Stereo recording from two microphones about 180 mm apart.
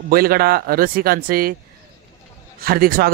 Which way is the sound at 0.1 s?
55° right (ahead or behind).